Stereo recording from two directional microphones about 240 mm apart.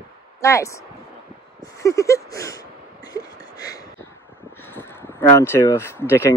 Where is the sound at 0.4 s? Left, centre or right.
Centre.